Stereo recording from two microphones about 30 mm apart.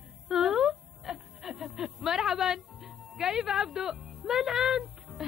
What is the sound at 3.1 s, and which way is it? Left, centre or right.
Speech, centre.